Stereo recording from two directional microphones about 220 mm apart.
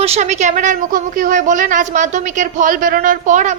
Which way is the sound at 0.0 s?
30° right (ahead or behind).